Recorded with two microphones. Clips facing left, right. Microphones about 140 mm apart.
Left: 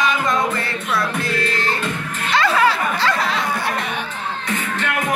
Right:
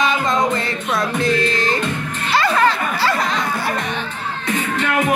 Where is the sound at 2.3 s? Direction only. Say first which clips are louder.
Even; 5° right (ahead or behind).